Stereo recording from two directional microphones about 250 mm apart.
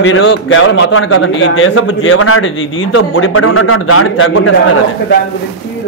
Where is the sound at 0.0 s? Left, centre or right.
Left.